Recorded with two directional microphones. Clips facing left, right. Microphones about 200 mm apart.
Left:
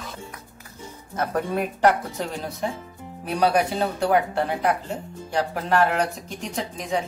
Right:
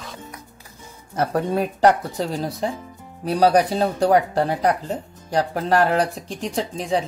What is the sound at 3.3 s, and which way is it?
Speech, 35° right (ahead or behind).